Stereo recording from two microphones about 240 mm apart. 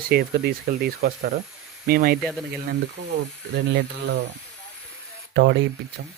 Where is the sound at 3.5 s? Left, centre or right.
Right.